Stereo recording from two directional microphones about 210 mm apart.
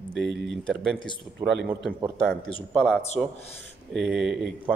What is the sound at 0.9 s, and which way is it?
Speech, 20° left (ahead or behind).